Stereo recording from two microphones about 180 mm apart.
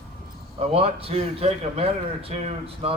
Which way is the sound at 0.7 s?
35° right (ahead or behind).